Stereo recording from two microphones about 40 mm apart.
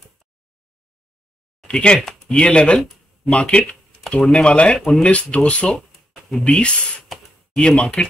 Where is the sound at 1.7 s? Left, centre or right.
Left.